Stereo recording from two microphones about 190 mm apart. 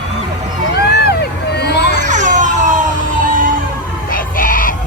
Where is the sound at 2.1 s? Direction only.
40° right (ahead or behind).